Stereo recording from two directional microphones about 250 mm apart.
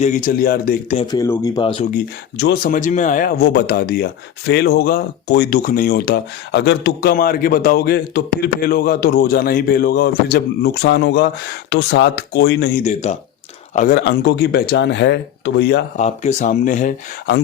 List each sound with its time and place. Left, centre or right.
0.0 s speech: left
1.1 s speech: centre
2.4 s speech: left
12.8 s speech: left
16.0 s speech: left